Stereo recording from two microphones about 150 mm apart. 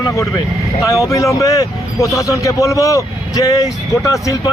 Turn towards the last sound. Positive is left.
turn(degrees=20)  # may be behind; listen again after turning